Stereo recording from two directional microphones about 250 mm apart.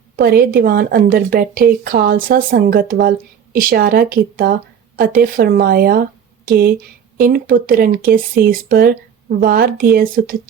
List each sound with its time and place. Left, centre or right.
0.2 s speech: right